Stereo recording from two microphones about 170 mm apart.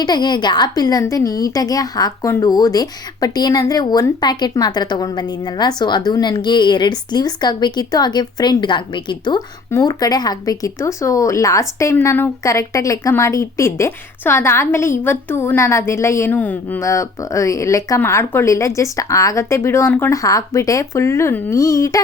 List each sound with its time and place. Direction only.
0.0 s a woman's voice: 25° left (ahead or behind)